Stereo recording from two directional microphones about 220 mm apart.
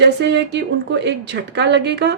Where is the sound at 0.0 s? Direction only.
50° right (ahead or behind).